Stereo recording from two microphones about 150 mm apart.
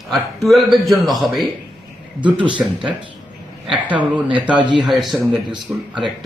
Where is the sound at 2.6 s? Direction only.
5° right (ahead or behind).